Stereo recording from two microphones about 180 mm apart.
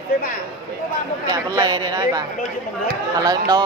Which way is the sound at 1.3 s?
20° right (ahead or behind).